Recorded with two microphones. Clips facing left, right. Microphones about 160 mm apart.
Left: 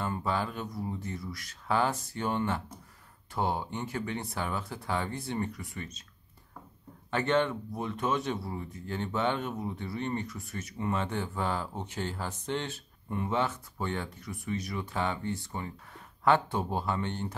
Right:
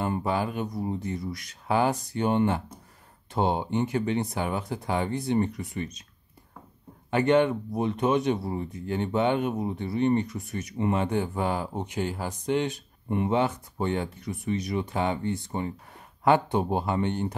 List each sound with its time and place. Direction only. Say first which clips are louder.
0.0 s speech: right 5 dB; 15° right (ahead or behind)
7.1 s speech: right 6 dB; 15° right (ahead or behind)